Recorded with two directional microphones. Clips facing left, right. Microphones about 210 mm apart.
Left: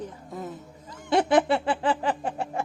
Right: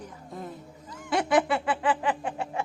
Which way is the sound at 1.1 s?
25° left (ahead or behind).